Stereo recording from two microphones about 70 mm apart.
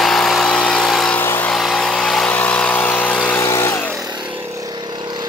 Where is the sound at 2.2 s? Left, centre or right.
Left.